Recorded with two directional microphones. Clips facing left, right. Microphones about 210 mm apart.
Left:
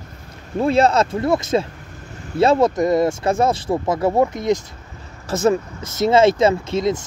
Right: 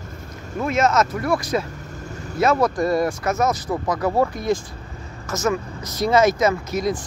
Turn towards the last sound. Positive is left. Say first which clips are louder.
# left 3 dB
turn(degrees=25)  # may be behind; listen again after turning